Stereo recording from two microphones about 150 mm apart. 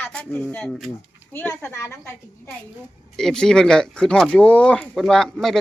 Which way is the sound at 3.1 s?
5° left (ahead or behind).